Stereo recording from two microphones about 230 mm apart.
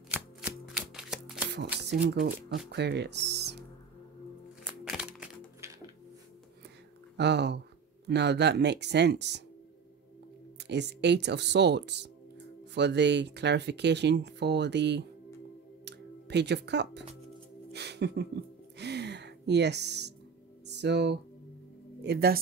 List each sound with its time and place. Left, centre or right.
0.1 s a sound: centre
2.0 s speech: right
2.7 s music: right
4.6 s music: centre
7.2 s speech: right
10.6 s speech: right
15.8 s a sound: right
17.7 s music: right
22.0 s speech: right